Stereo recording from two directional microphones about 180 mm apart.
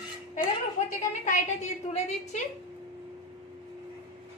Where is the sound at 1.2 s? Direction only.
45° left (ahead or behind).